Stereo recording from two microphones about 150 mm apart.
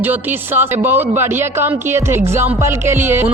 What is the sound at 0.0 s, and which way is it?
Speech, 15° right (ahead or behind).